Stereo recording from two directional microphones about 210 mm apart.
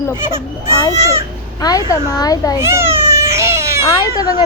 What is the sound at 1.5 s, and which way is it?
A woman's voice, 20° left (ahead or behind).